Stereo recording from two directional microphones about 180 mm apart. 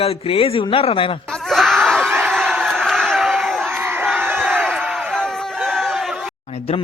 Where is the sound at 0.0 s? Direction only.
35° left (ahead or behind).